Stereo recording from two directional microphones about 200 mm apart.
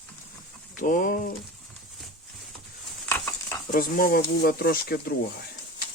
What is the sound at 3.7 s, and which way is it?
Speech, 45° left (ahead or behind).